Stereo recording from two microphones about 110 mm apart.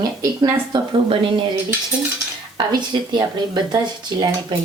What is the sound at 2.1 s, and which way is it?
Speech, 40° right (ahead or behind).